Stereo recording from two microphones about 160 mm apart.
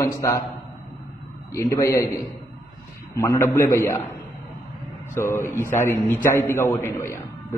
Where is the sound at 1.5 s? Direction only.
20° left (ahead or behind).